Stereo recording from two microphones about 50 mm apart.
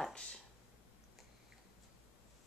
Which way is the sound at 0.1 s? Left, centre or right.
Centre.